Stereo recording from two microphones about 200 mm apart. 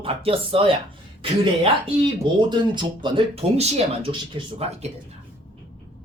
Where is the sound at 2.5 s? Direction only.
25° right (ahead or behind).